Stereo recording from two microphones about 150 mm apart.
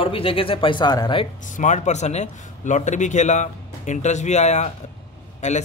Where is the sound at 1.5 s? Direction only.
55° left (ahead or behind).